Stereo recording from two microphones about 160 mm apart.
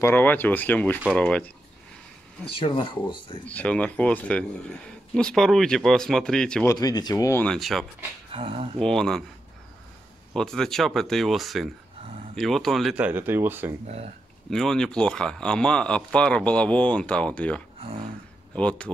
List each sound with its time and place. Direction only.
0.0 s speech: 10° left (ahead or behind)
2.4 s speech: 35° left (ahead or behind)
3.4 s speech: 10° left (ahead or behind)
6.6 s speech: 20° left (ahead or behind)
7.4 s speech: centre (ahead or behind)
8.3 s speech: 35° right (ahead or behind)
8.7 s speech: 5° left (ahead or behind)
10.3 s speech: 5° left (ahead or behind); by 13.7 s 15° right (ahead or behind)
14.5 s speech: centre (ahead or behind)
17.7 s a sound: 35° right (ahead or behind)
18.5 s speech: 5° left (ahead or behind)